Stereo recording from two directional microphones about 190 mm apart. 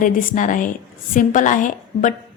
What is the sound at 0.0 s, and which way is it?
A woman's voice, 45° left (ahead or behind).